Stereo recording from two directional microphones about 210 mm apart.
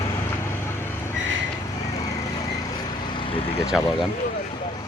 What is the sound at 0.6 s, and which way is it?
Vehicle, 10° left (ahead or behind).